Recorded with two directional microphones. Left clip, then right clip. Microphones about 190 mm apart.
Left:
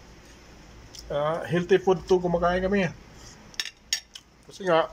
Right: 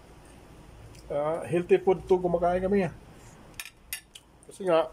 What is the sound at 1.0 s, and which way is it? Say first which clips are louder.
Speech: left 2 dB; 15° right (ahead or behind).